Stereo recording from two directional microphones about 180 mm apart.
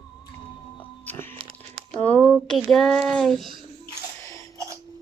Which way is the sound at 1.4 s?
30° right (ahead or behind).